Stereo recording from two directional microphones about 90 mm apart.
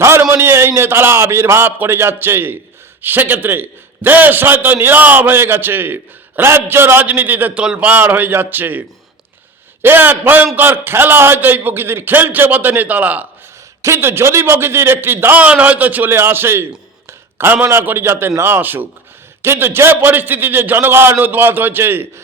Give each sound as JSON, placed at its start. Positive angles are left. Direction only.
{"t": 0.0, "sound": "a man's voice", "side_deg": -30}
{"t": 9.8, "sound": "a man's voice", "side_deg": -20}